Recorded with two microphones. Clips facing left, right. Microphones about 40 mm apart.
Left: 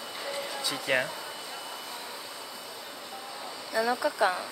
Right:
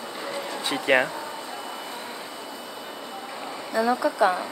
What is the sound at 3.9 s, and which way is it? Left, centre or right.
Speech, right.